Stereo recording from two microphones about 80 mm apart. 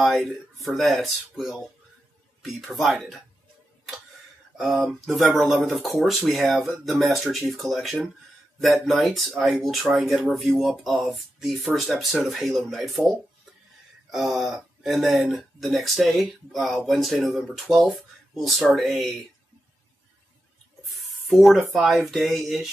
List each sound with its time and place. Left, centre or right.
0.0 s speech: centre
4.6 s speech: centre
20.9 s a sound: centre
21.6 s speech: centre